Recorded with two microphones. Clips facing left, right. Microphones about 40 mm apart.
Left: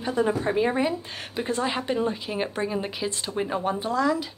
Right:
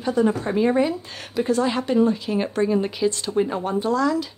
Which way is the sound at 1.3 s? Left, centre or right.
Left.